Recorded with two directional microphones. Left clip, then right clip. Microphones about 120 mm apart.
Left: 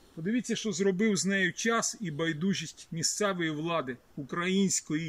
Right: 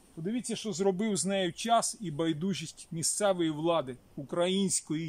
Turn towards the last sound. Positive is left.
turn(degrees=-35)  # may be behind; listen again after turning